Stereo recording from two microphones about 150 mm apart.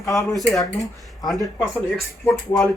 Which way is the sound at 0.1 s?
20° left (ahead or behind).